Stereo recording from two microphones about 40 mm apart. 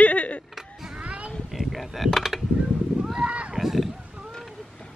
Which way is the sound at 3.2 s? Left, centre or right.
Right.